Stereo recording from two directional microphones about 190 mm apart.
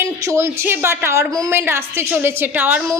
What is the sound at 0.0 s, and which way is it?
A woman's voice, 15° right (ahead or behind).